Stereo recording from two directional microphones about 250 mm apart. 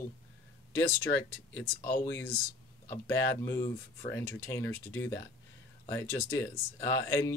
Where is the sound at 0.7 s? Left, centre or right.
Centre.